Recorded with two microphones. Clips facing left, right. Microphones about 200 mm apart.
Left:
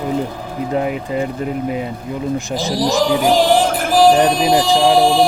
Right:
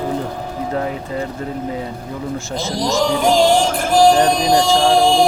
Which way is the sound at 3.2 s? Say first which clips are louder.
Right 1 dB; 5° left (ahead or behind).